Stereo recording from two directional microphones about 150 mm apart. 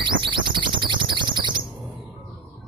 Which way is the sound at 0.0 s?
30° right (ahead or behind).